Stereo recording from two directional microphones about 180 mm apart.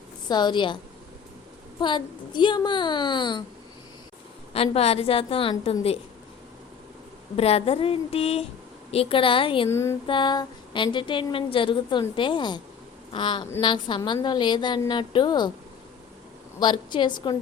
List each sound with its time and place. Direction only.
0.3 s a woman's voice: 25° left (ahead or behind)
1.8 s a woman's voice: 25° left (ahead or behind)
4.5 s a woman's voice: 35° left (ahead or behind)
7.3 s a woman's voice: 35° left (ahead or behind)
9.6 s a sound: 15° left (ahead or behind)
10.1 s a woman's voice: 25° left (ahead or behind)
16.6 s a woman's voice: 25° left (ahead or behind)